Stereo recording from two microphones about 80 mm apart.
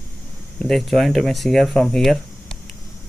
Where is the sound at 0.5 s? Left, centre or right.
Centre.